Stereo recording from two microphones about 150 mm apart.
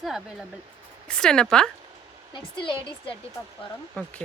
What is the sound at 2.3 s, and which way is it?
Speech, 35° left (ahead or behind).